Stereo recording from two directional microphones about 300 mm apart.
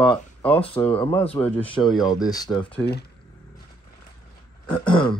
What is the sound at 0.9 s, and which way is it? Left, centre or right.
Speech, centre.